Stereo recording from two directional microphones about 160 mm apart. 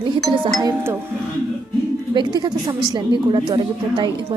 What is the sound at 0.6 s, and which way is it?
Speech, 20° right (ahead or behind).